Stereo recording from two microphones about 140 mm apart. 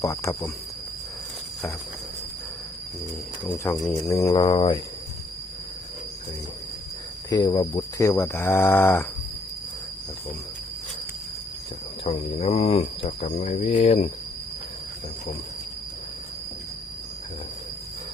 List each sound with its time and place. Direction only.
0.0 s speech: 20° left (ahead or behind)
3.4 s speech: 15° left (ahead or behind)
4.5 s speech: 35° left (ahead or behind)
7.3 s speech: 25° left (ahead or behind)
8.0 s speech: 20° left (ahead or behind)
12.0 s speech: 50° left (ahead or behind)